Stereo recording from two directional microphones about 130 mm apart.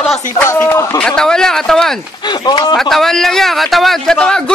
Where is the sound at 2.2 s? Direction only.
35° left (ahead or behind).